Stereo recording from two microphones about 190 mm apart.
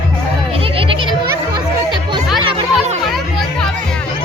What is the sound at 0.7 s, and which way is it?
Music, 25° right (ahead or behind).